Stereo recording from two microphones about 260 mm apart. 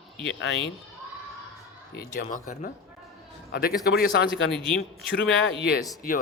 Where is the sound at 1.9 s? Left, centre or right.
Left.